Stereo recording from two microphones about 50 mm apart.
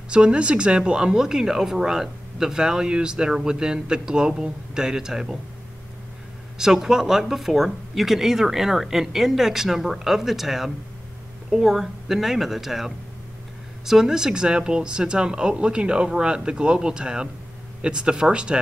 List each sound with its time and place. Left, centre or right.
0.1 s speech: right
6.6 s a woman's voice: centre